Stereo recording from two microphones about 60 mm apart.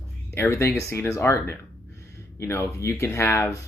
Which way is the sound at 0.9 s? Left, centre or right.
Left.